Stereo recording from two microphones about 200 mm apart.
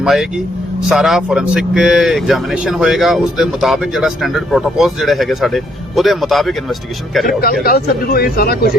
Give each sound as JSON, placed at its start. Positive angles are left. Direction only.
{"t": 0.0, "sound": "speech", "side_deg": 0}
{"t": 7.6, "sound": "speech", "side_deg": 50}